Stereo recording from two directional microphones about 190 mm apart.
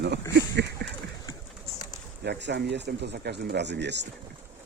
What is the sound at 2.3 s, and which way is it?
Speech, 65° right (ahead or behind).